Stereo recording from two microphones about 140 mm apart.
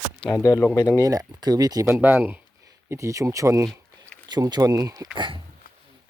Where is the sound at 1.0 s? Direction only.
25° right (ahead or behind).